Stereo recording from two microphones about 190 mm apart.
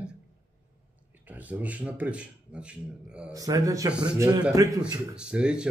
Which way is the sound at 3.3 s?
20° right (ahead or behind).